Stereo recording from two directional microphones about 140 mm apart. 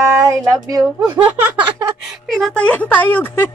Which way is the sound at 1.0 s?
10° right (ahead or behind).